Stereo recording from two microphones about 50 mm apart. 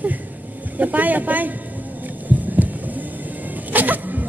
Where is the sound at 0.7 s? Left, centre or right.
Right.